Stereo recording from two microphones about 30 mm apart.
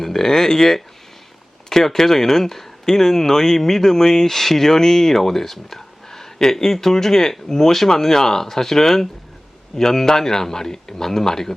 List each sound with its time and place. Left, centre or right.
0.0 s speech: centre